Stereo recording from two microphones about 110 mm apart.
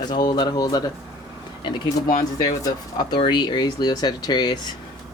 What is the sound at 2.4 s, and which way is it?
Speech, 40° left (ahead or behind).